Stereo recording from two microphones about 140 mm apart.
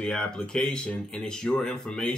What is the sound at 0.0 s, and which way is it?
Speech, centre (ahead or behind).